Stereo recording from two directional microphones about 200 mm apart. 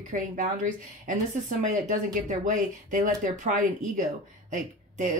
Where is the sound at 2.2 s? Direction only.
40° right (ahead or behind).